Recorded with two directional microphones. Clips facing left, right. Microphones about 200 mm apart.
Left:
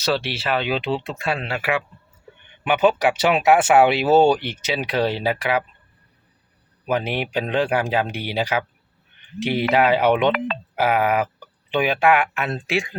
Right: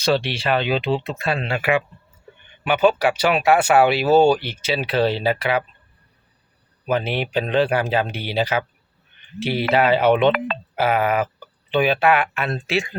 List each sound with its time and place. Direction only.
0.0 s speech: 5° left (ahead or behind)
2.6 s speech: 20° left (ahead or behind)
6.8 s speech: 15° left (ahead or behind)